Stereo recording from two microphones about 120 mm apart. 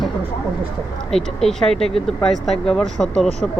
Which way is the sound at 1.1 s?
5° left (ahead or behind).